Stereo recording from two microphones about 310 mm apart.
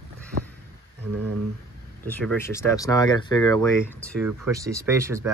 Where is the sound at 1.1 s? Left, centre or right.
Right.